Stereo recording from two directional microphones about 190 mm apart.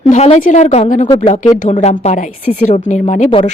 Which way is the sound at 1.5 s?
35° left (ahead or behind).